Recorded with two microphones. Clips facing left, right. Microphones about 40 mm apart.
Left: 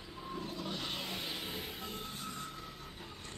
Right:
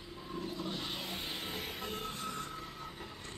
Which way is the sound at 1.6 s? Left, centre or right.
Right.